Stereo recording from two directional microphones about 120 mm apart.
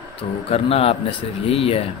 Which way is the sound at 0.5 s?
55° left (ahead or behind).